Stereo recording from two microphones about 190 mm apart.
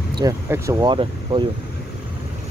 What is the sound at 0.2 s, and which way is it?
Speech, 15° right (ahead or behind).